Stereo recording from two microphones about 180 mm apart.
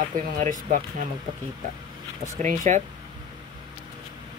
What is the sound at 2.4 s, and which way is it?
Speech, 40° right (ahead or behind).